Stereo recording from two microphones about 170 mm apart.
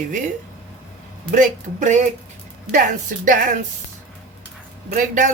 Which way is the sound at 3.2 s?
50° right (ahead or behind).